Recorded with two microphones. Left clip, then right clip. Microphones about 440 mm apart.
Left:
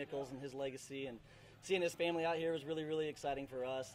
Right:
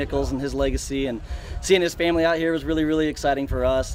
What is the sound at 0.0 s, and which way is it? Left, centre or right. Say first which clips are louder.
Speech: right 19 dB; left.